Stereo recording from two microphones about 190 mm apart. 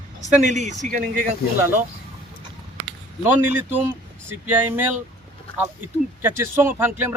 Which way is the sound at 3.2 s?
10° right (ahead or behind).